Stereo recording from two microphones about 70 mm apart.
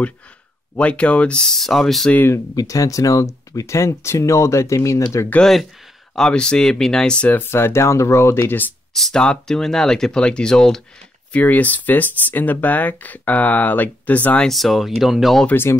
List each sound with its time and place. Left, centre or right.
0.7 s speech: centre
2.5 s speech: left
5.4 s speech: centre
7.3 s speech: left
8.9 s speech: centre
11.3 s speech: left
14.5 s speech: centre